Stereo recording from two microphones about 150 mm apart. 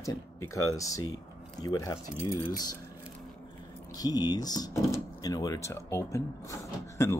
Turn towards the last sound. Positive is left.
turn(degrees=20)  # may be behind; listen again after turning